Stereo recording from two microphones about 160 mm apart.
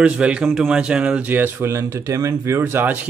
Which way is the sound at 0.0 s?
5° right (ahead or behind).